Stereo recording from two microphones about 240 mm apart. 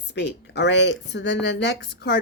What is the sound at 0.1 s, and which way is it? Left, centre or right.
Speech, left.